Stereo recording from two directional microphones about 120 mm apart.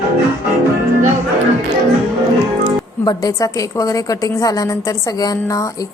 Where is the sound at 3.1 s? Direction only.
30° left (ahead or behind).